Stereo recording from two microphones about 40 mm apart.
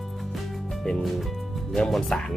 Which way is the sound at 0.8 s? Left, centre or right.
Centre.